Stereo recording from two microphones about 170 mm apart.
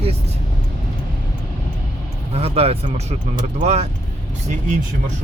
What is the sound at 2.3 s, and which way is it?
Speech, 35° right (ahead or behind).